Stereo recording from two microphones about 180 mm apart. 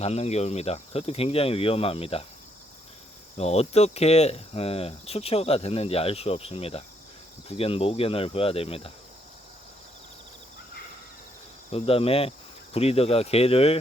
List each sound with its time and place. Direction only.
0.0 s speech: 35° left (ahead or behind)
3.3 s speech: 35° left (ahead or behind)
11.7 s speech: 30° left (ahead or behind)